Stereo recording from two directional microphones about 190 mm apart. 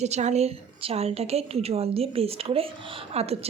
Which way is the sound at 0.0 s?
35° right (ahead or behind).